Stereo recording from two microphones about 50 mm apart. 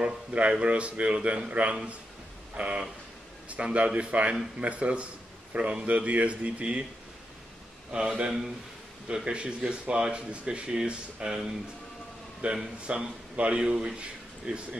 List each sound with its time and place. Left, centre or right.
0.0 s a man's voice: right
7.9 s a man's voice: right
9.1 s a man's voice: centre
12.4 s a man's voice: right